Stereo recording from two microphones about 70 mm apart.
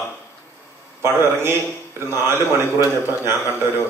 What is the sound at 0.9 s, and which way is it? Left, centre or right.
Speech, right.